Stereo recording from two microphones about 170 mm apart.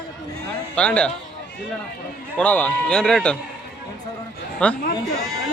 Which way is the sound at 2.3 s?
10° left (ahead or behind).